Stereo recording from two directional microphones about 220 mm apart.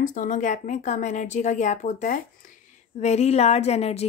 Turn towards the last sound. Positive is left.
turn(degrees=30)  # may be behind; listen again after turning